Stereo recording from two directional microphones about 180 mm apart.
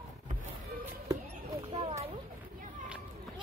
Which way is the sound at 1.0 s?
20° right (ahead or behind).